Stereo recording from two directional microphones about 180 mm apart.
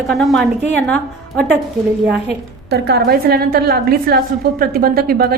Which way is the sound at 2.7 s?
60° right (ahead or behind).